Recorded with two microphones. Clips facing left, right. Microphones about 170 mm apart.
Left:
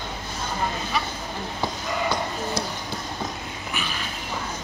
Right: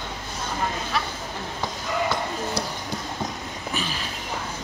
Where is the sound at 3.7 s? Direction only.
35° right (ahead or behind).